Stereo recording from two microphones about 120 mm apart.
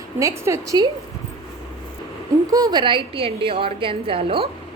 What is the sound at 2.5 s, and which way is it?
A woman's voice, 35° right (ahead or behind).